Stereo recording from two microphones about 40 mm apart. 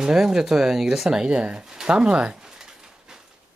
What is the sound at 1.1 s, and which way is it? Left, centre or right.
Speech, right.